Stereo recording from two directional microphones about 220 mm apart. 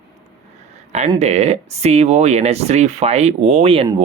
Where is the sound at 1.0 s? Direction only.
30° right (ahead or behind).